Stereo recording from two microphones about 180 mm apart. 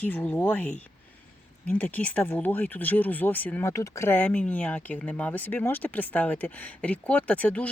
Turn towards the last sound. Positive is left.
turn(degrees=5)  # may be behind; listen again after turning